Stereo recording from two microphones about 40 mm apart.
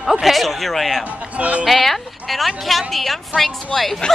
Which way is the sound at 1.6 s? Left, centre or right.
Centre.